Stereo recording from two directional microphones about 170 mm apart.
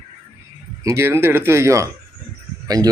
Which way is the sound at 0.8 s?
15° right (ahead or behind).